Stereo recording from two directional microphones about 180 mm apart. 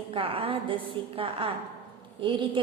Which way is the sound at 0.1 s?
30° right (ahead or behind).